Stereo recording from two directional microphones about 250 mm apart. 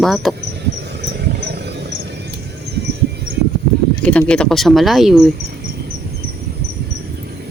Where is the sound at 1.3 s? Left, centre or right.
Right.